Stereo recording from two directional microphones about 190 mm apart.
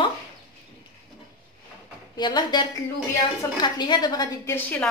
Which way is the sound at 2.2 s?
25° left (ahead or behind).